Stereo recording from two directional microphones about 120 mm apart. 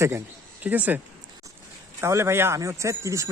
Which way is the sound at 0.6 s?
15° right (ahead or behind).